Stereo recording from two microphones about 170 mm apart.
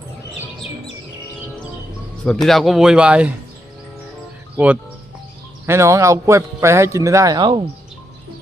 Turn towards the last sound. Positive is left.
turn(degrees=-25)  # may be behind; listen again after turning